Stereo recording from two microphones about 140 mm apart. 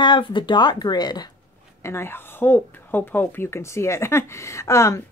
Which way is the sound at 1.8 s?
20° left (ahead or behind).